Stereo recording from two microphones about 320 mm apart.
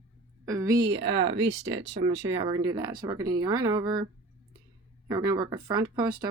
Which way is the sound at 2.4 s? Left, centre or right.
Centre.